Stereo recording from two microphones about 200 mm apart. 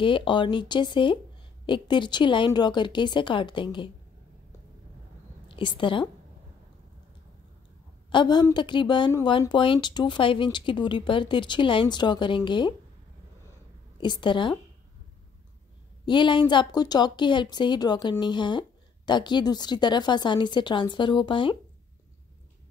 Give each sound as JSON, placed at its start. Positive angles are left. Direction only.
{"t": 0.0, "sound": "speech", "side_deg": 25}
{"t": 5.6, "sound": "speech", "side_deg": 25}
{"t": 8.1, "sound": "speech", "side_deg": 20}
{"t": 13.9, "sound": "speech", "side_deg": 20}
{"t": 16.1, "sound": "speech", "side_deg": 25}